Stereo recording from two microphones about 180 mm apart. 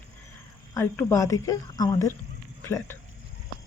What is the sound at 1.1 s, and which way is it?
Speech, 15° left (ahead or behind).